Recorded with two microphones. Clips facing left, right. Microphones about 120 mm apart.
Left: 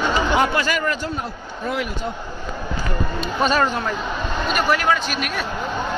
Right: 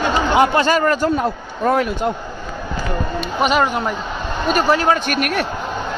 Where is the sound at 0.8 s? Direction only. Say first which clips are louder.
Right 8 dB; 45° right (ahead or behind).